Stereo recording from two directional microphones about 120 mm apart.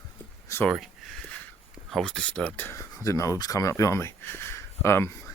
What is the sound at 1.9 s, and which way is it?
Speech, 5° left (ahead or behind).